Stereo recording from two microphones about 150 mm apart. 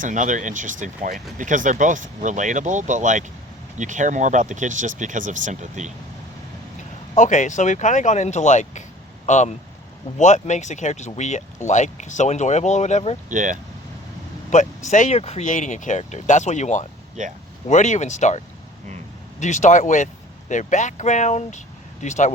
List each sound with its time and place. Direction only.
0.0 s speech: 60° right (ahead or behind)
7.2 s speech: 55° left (ahead or behind)
13.3 s speech: 60° right (ahead or behind)
14.5 s speech: 50° left (ahead or behind)